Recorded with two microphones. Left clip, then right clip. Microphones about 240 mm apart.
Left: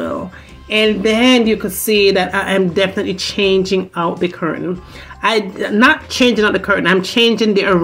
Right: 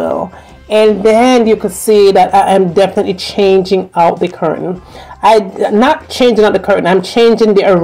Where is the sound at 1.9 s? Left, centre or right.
Right.